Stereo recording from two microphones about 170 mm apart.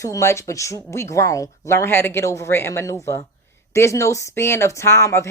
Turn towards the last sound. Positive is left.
turn(degrees=15)  # may be behind; listen again after turning